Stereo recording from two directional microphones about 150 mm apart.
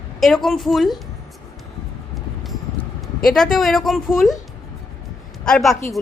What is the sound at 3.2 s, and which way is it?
Speech, 5° left (ahead or behind).